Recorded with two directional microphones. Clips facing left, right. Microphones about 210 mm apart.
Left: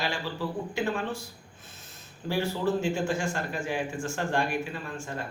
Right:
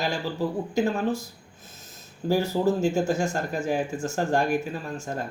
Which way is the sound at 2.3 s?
40° right (ahead or behind).